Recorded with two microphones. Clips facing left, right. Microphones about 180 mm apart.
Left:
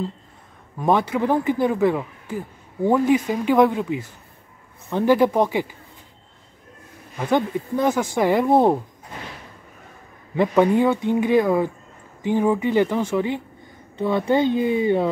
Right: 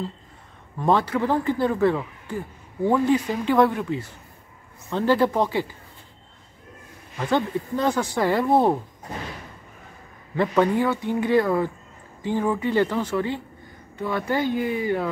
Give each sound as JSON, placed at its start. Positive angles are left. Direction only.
{"t": 0.7, "sound": "speech", "side_deg": 15}
{"t": 7.2, "sound": "speech", "side_deg": 15}
{"t": 10.3, "sound": "speech", "side_deg": 15}